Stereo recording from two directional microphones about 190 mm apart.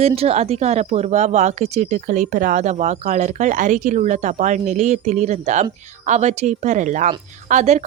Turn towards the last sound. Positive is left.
turn(degrees=-40)  # may be behind; listen again after turning